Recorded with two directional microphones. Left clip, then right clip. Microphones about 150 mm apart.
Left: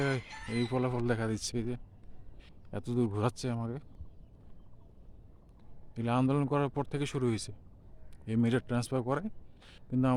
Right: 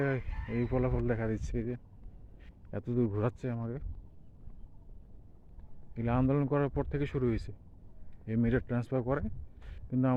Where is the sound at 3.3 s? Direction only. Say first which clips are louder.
Left 1 dB; 30° left (ahead or behind).